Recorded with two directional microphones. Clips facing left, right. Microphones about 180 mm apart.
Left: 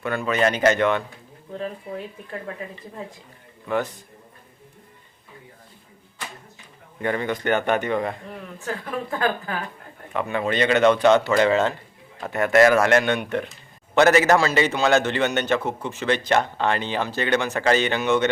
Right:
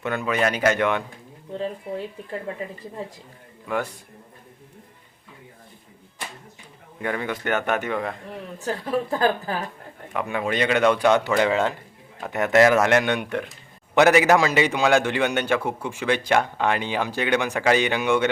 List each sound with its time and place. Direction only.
0.0 s a man's voice: 20° right (ahead or behind)
1.5 s speech: 25° right (ahead or behind)
7.0 s speech: 5° right (ahead or behind)
8.5 s a woman's voice: 35° right (ahead or behind)
10.2 s a man's voice: 10° right (ahead or behind)